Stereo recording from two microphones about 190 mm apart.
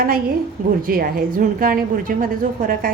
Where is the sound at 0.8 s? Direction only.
50° right (ahead or behind).